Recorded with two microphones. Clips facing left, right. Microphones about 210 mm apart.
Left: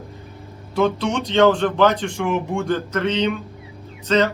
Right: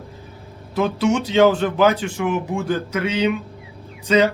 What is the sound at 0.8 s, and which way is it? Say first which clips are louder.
Speech: right 1 dB; 5° right (ahead or behind).